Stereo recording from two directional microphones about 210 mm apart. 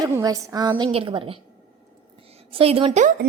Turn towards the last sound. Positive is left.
turn(degrees=-35)  # may be behind; listen again after turning